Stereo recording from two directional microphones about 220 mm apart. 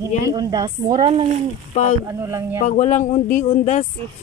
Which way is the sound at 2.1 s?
10° right (ahead or behind).